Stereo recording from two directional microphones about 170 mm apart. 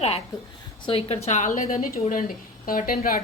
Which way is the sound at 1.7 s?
55° left (ahead or behind).